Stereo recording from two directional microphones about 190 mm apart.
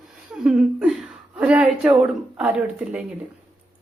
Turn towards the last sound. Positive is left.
turn(degrees=-5)  # may be behind; listen again after turning